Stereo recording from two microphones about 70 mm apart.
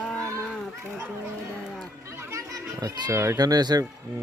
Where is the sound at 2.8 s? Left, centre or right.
Right.